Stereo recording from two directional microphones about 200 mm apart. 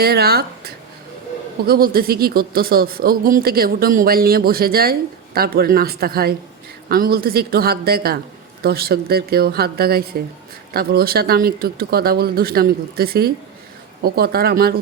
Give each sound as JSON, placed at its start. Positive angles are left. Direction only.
{"t": 0.0, "sound": "speech", "side_deg": -50}